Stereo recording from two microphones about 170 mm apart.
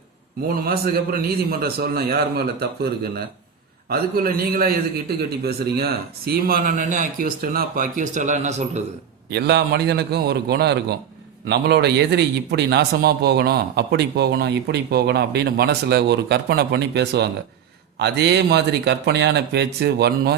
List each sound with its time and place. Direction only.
0.4 s a man's voice: 60° right (ahead or behind); by 8.8 s 40° right (ahead or behind)
9.3 s a man's voice: 75° right (ahead or behind)